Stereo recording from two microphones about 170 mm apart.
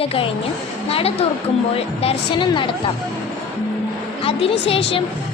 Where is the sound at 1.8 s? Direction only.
30° left (ahead or behind).